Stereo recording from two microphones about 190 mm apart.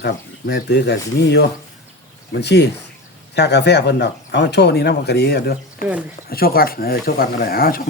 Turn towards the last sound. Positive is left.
turn(degrees=50)  # may be behind; listen again after turning